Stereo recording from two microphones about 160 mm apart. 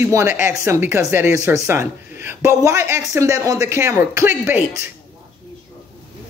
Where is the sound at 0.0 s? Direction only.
15° right (ahead or behind).